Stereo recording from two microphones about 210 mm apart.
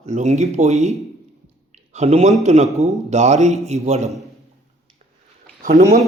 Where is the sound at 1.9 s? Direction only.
30° right (ahead or behind).